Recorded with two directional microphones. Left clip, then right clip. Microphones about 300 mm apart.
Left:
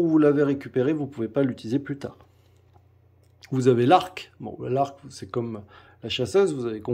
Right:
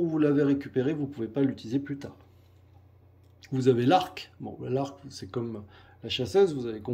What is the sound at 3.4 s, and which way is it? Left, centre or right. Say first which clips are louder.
Speech: left 4 dB; centre.